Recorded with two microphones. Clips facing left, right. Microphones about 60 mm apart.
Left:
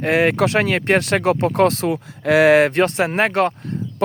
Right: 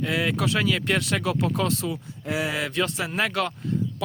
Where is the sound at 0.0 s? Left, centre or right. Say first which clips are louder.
Left 9 dB; left.